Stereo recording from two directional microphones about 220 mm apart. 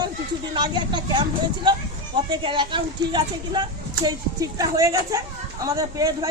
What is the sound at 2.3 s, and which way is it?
A woman's voice, 20° right (ahead or behind).